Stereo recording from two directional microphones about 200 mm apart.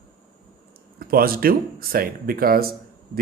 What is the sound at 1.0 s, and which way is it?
A man's voice, 45° right (ahead or behind).